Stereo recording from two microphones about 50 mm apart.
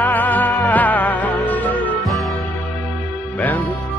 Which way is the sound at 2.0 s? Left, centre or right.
Centre.